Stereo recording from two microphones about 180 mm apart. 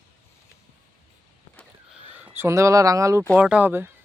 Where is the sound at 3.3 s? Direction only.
5° right (ahead or behind).